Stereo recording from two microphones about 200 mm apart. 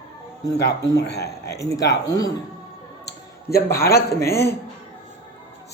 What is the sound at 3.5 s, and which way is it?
Speech, 15° left (ahead or behind).